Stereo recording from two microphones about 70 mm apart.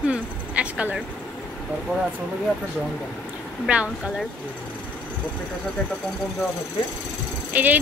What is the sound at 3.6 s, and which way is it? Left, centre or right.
Speech, centre.